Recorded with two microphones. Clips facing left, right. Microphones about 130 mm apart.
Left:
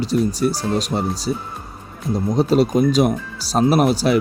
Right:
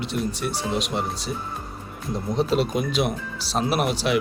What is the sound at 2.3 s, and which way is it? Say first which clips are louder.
Speech: left 6 dB; 40° left (ahead or behind).